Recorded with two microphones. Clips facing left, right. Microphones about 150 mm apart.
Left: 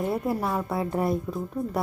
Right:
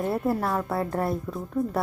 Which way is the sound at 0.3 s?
Centre (ahead or behind).